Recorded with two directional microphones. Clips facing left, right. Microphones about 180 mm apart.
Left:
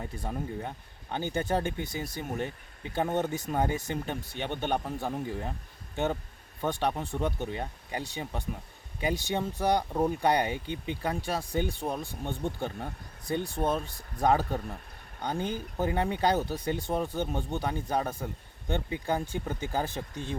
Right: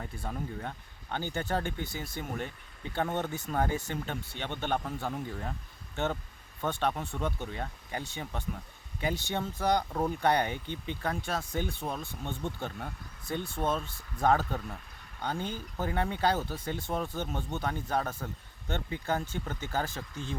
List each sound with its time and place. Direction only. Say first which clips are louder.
0.0 s speech: left 2 dB; 20° left (ahead or behind)
6.6 s speech: left 2 dB; 15° left (ahead or behind)